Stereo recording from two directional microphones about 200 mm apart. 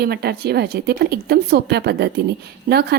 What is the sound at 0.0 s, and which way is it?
A woman's voice, 50° right (ahead or behind).